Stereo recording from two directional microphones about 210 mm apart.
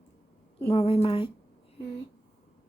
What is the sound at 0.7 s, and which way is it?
Speech, 25° left (ahead or behind).